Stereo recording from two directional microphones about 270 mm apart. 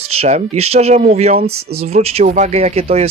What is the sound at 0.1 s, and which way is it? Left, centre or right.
Speech, right.